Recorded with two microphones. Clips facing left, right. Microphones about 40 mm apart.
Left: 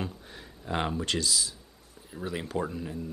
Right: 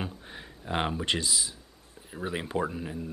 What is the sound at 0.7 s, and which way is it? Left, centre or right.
Speech, centre.